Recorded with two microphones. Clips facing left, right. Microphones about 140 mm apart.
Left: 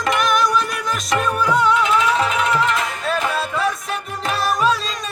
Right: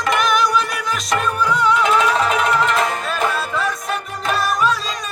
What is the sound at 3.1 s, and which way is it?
Music, 35° left (ahead or behind).